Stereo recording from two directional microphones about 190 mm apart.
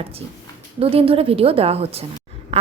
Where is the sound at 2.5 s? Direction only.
35° right (ahead or behind).